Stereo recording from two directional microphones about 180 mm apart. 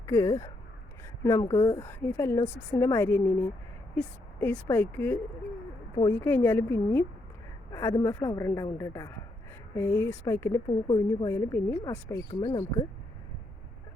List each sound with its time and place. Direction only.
0.0 s a woman's voice: 15° left (ahead or behind)
10.7 s speech: 25° left (ahead or behind)
11.3 s a woman's voice: 15° left (ahead or behind)